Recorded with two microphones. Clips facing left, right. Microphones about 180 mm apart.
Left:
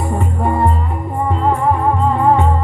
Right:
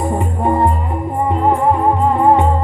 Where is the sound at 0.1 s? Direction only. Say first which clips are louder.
Right 2 dB; 15° right (ahead or behind).